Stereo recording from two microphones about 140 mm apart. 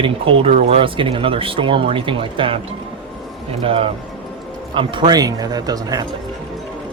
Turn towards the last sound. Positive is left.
turn(degrees=-25)  # may be behind; listen again after turning